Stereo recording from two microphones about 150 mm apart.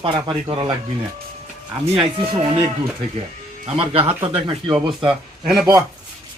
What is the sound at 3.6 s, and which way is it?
Speech, 40° right (ahead or behind).